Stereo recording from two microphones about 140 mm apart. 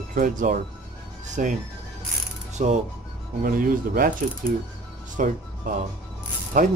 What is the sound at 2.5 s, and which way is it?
Speech, 55° right (ahead or behind).